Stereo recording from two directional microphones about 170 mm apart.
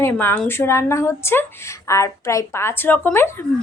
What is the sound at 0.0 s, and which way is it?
Speech, 10° left (ahead or behind).